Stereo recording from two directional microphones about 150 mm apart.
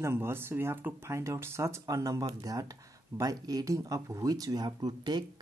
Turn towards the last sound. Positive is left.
turn(degrees=-30)  # may be behind; listen again after turning